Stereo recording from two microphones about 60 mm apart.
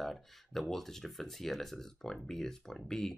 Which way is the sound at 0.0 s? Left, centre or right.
Centre.